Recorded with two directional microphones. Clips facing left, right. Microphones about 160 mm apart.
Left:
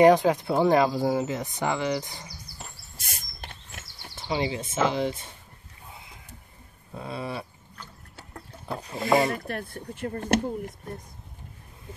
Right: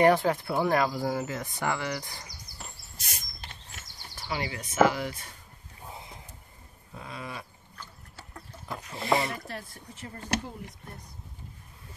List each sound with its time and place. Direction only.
0.0 s speech: 15° left (ahead or behind)
3.0 s a sound: 50° left (ahead or behind)
4.2 s speech: 25° left (ahead or behind)
6.9 s a sound: 30° left (ahead or behind)
8.6 s speech: 35° left (ahead or behind)
9.3 s speech: 60° left (ahead or behind)